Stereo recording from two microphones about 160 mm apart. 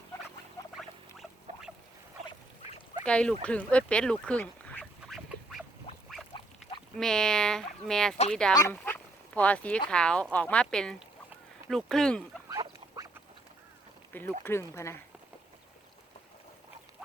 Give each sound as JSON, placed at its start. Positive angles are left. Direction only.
{"t": 0.8, "sound": "rodents", "side_deg": 0}
{"t": 3.0, "sound": "speech", "side_deg": 5}
{"t": 3.4, "sound": "duck", "side_deg": 5}
{"t": 6.3, "sound": "duck", "side_deg": 30}
{"t": 6.9, "sound": "speech", "side_deg": 5}
{"t": 8.5, "sound": "speech", "side_deg": 15}
{"t": 12.5, "sound": "duck", "side_deg": -25}
{"t": 14.1, "sound": "speech", "side_deg": 15}